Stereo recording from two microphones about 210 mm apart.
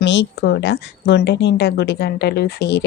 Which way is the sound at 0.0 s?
60° left (ahead or behind).